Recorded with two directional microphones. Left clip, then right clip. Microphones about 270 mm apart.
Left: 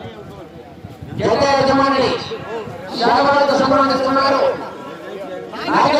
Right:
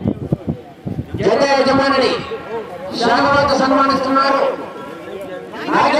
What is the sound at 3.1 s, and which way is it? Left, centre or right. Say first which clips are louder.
A man's voice: even; right.